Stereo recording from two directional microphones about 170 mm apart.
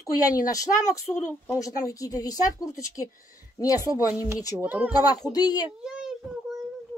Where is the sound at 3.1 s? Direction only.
55° left (ahead or behind).